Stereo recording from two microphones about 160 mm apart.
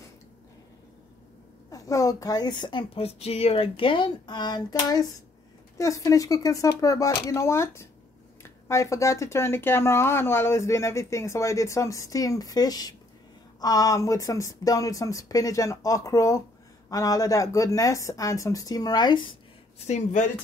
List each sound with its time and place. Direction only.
1.7 s speech: 20° left (ahead or behind)
19.8 s speech: 50° left (ahead or behind)